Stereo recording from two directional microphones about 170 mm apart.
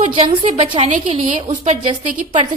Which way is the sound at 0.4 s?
45° right (ahead or behind).